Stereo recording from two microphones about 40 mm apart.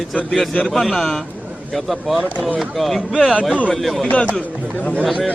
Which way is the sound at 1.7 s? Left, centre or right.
Centre.